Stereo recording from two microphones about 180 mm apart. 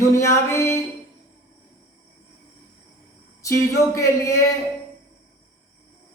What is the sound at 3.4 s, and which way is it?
Speech, 20° left (ahead or behind).